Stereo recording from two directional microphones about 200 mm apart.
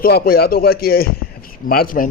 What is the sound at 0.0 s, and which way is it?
Speech, 50° left (ahead or behind).